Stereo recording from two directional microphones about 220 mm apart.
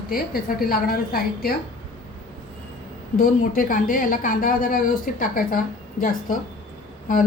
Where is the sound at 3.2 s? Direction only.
40° left (ahead or behind).